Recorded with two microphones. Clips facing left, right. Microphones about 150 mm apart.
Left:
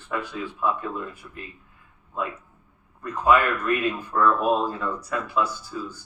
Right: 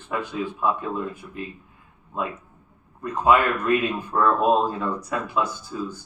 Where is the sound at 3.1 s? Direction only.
20° right (ahead or behind).